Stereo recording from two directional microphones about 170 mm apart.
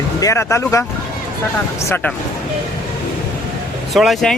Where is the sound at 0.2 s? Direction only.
15° left (ahead or behind).